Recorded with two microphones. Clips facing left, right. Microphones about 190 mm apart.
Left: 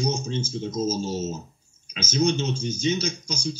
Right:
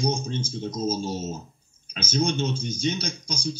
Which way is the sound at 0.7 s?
35° right (ahead or behind).